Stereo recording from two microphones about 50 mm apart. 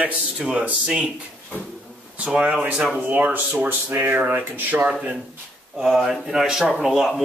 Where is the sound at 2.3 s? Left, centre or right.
Centre; by 4.9 s right.